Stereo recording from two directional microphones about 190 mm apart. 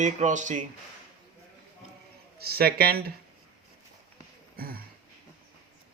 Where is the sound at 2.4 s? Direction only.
55° right (ahead or behind).